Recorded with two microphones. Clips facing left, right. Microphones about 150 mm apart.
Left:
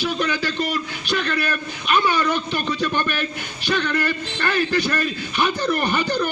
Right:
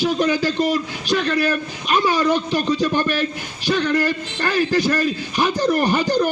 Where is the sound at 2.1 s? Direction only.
35° right (ahead or behind).